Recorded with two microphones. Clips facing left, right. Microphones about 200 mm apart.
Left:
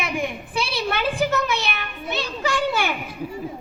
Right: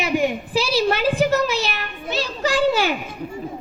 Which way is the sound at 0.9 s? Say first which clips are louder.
Right 2 dB; 30° right (ahead or behind).